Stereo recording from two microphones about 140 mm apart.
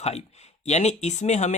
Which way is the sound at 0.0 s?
50° left (ahead or behind).